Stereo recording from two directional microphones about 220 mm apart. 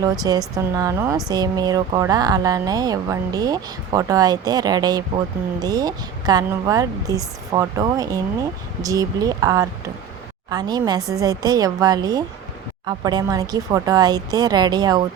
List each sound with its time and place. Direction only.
0.0 s a woman's voice: 15° right (ahead or behind)